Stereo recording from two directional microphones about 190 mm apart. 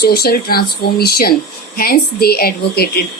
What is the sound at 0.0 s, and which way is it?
A woman's voice, 55° left (ahead or behind).